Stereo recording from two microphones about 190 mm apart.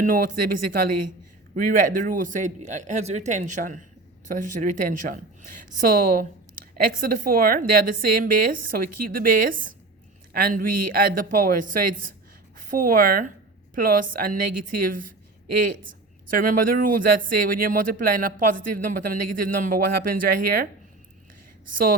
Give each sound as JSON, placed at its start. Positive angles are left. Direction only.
{"t": 0.0, "sound": "speech", "side_deg": -45}
{"t": 1.5, "sound": "speech", "side_deg": -45}